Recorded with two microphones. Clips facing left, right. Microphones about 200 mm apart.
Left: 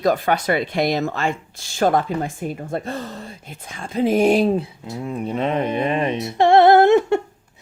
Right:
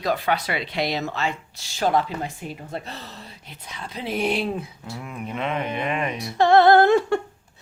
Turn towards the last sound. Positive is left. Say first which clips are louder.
# left 3 dB
turn(degrees=25)  # may be behind; listen again after turning